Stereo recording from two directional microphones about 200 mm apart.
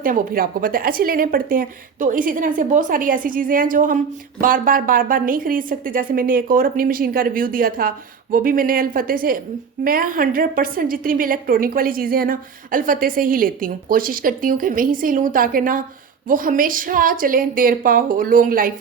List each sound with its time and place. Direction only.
0.0 s a woman's voice: 45° right (ahead or behind)